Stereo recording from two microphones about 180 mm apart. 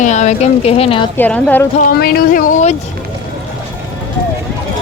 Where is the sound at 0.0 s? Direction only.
40° left (ahead or behind).